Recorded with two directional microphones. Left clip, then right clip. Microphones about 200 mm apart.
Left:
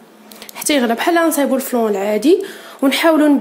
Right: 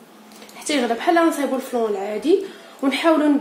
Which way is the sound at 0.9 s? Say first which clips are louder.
Left 3 dB; 45° left (ahead or behind).